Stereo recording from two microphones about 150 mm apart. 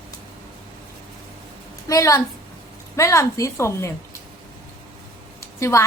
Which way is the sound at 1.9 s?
20° left (ahead or behind).